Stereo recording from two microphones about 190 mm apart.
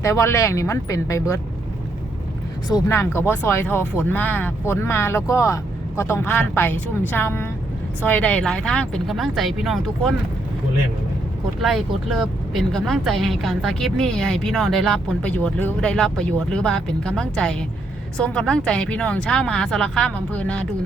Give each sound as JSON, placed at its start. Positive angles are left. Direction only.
{"t": 0.0, "sound": "speech", "side_deg": 15}
{"t": 2.6, "sound": "speech", "side_deg": 15}
{"t": 11.6, "sound": "speech", "side_deg": 0}